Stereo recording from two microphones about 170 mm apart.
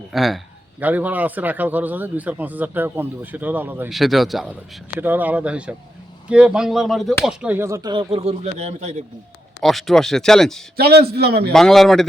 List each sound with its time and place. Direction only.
0.1 s a man's voice: centre (ahead or behind)
3.8 s a man's voice: centre (ahead or behind); by 9.0 s 40° right (ahead or behind)
9.6 s speech: centre (ahead or behind)
10.8 s a man's voice: 70° right (ahead or behind)
11.5 s speech: centre (ahead or behind)